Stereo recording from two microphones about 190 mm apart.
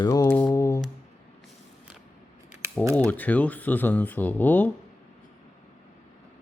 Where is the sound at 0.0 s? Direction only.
20° left (ahead or behind).